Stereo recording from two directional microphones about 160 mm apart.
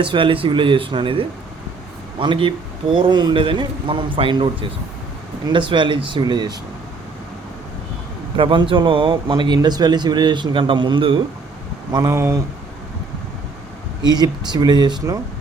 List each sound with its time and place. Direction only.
0.0 s a man's voice: 30° right (ahead or behind)
8.4 s speech: 30° right (ahead or behind); by 12.4 s 15° right (ahead or behind)
14.0 s speech: 25° right (ahead or behind)